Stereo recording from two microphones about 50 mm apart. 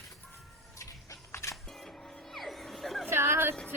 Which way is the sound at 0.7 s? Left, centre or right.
Left.